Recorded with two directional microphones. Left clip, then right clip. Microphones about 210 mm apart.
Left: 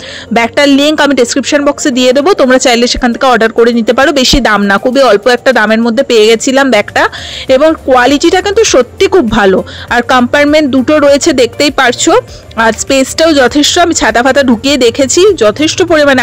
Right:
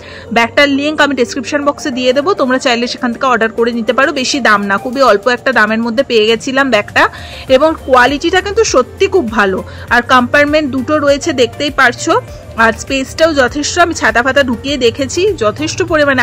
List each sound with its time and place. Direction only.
0.3 s a woman's voice: 40° left (ahead or behind)